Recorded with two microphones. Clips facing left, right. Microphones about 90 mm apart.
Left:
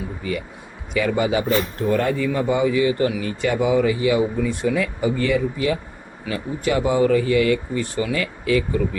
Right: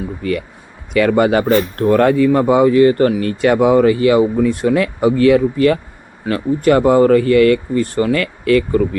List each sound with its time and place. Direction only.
0.2 s speech: 65° right (ahead or behind)